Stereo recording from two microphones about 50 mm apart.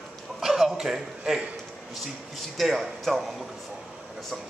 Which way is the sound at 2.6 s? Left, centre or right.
Centre.